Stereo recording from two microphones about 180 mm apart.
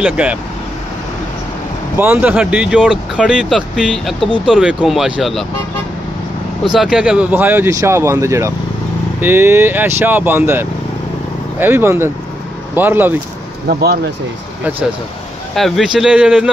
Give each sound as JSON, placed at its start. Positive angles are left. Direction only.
{"t": 0.0, "sound": "speech", "side_deg": -5}
{"t": 2.0, "sound": "speech", "side_deg": -10}
{"t": 6.7, "sound": "speech", "side_deg": -5}
{"t": 13.7, "sound": "speech", "side_deg": -60}
{"t": 15.5, "sound": "speech", "side_deg": 0}